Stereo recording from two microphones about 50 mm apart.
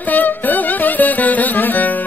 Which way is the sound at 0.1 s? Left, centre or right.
Left.